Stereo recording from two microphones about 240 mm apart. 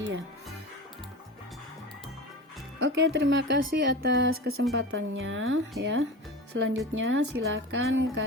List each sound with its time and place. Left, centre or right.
2.7 s speech: right